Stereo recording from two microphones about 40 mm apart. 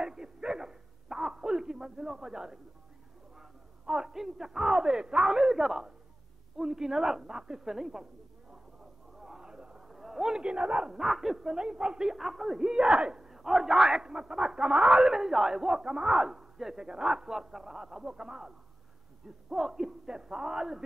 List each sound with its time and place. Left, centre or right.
0.0 s dog: centre
3.8 s a man's voice: centre
9.2 s a sound: centre
9.9 s a sound: centre
10.3 s speech: right
11.0 s a man's voice: centre; by 12.1 s right
12.1 s a man's voice: centre
13.3 s a man's voice: centre
19.5 s a man's voice: centre